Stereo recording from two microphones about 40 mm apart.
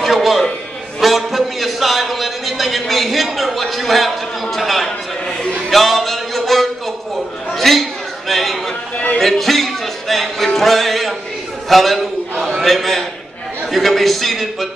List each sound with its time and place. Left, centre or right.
0.0 s a man's voice: centre
5.7 s music: centre
7.5 s a sound: centre
8.9 s speech: left
9.2 s a man's voice: centre